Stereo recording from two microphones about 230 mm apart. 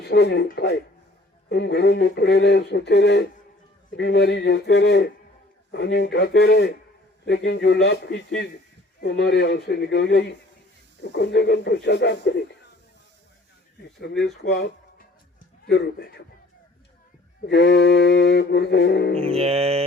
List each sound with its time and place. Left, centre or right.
0.0 s speech: left
14.4 s music: left
15.6 s speech: left
17.4 s speech: left
19.3 s mantra: right